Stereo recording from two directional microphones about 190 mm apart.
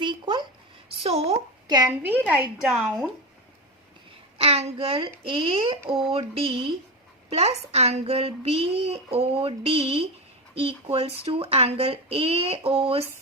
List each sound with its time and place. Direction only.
0.0 s a sound: 25° right (ahead or behind)
0.9 s a woman's voice: 30° right (ahead or behind)
1.6 s a woman's voice: 20° right (ahead or behind); by 3.1 s centre (ahead or behind)
4.4 s a child's voice: 30° right (ahead or behind)